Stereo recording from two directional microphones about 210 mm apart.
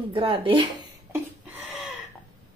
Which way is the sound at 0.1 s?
25° right (ahead or behind).